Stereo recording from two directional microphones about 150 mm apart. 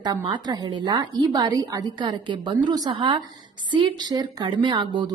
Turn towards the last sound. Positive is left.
turn(degrees=-30)  # may be behind; listen again after turning